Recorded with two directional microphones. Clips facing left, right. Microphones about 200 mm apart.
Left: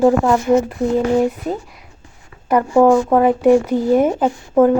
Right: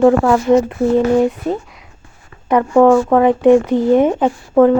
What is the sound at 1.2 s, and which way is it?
Speech, 5° left (ahead or behind).